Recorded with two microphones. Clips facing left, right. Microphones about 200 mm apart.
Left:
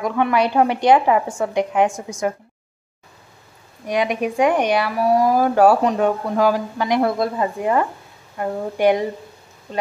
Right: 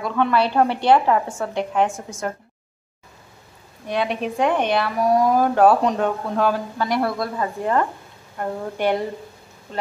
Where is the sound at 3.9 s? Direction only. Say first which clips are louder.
Left 3 dB; 15° left (ahead or behind).